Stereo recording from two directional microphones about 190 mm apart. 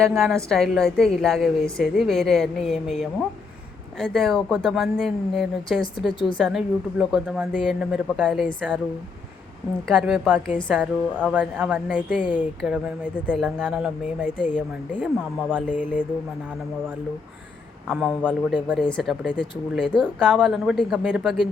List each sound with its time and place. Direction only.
0.0 s a woman's voice: centre (ahead or behind)
9.8 s a woman's voice: centre (ahead or behind)
15.7 s a sound: 40° left (ahead or behind)
17.8 s a woman's voice: centre (ahead or behind)